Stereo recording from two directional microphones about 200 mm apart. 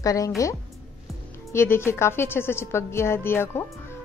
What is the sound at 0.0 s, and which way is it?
Speech, 15° left (ahead or behind).